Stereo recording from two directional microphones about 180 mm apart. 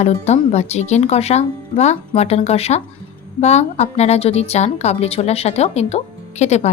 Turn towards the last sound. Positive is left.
turn(degrees=40)  # may be behind; listen again after turning